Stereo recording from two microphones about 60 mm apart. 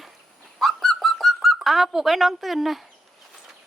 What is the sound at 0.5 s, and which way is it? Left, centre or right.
Bird, centre.